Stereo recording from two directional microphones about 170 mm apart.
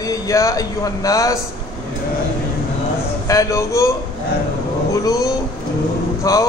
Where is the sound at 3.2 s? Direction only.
20° left (ahead or behind).